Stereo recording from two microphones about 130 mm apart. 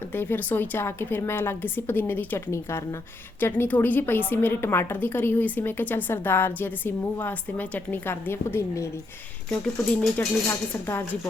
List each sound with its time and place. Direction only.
0.1 s a woman's voice: 15° left (ahead or behind)